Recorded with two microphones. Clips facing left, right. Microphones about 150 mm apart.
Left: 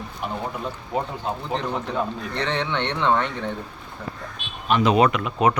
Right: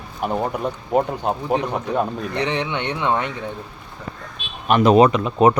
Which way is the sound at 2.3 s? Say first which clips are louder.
Right 1 dB; 10° right (ahead or behind).